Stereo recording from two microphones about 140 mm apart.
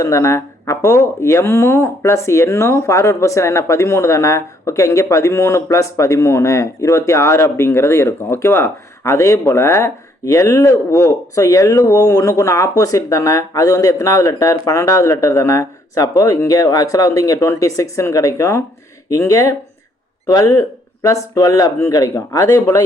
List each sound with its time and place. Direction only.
0.0 s speech: 20° left (ahead or behind)